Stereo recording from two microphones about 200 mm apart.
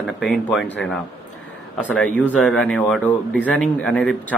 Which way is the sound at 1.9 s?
5° left (ahead or behind).